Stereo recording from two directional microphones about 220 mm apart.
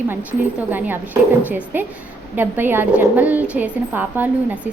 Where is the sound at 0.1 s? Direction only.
10° right (ahead or behind).